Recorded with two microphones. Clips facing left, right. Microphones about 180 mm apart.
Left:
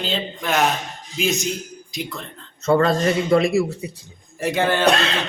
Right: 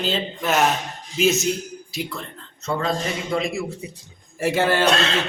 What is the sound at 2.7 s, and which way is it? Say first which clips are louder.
Speech: left 7 dB; 60° left (ahead or behind).